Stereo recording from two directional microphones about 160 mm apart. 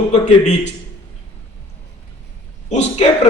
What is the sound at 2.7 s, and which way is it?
Speech, 45° left (ahead or behind).